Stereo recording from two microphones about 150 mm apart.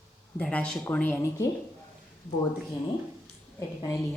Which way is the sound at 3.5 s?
20° left (ahead or behind).